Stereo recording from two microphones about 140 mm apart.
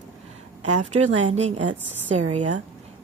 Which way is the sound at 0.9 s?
50° right (ahead or behind).